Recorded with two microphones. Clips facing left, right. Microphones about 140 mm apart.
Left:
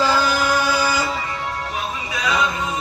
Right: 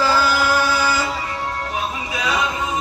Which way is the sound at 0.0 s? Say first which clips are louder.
Right 1 dB; 20° left (ahead or behind).